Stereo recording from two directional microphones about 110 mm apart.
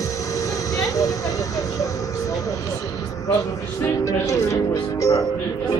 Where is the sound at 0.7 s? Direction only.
30° left (ahead or behind).